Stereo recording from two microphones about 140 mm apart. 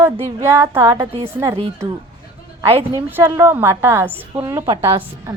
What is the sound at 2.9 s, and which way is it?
A woman's voice, 15° right (ahead or behind).